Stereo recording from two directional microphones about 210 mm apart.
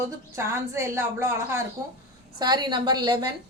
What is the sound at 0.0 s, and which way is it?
A woman's voice, 15° right (ahead or behind).